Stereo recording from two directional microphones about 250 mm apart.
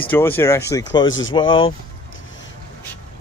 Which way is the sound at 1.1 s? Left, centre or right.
Left.